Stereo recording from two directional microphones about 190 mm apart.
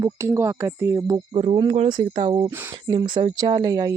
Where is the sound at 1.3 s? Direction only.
30° right (ahead or behind).